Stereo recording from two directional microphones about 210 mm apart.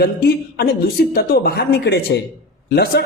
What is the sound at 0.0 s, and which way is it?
Speech, 50° left (ahead or behind).